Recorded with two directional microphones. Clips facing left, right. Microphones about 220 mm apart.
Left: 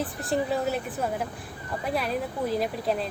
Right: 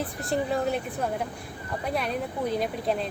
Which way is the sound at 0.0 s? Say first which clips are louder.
Left 1 dB; centre (ahead or behind).